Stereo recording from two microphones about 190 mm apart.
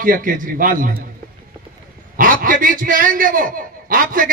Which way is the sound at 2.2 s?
45° right (ahead or behind).